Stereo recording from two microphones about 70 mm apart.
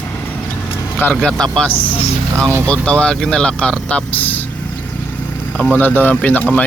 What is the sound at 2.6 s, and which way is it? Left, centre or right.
Speech, centre.